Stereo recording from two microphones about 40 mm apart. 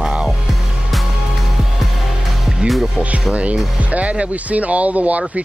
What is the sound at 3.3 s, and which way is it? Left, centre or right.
Speech, right.